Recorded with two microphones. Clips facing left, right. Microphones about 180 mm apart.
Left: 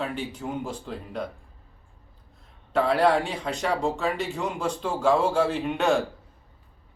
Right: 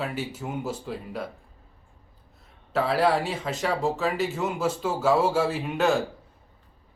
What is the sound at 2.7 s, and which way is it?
Speech, centre (ahead or behind).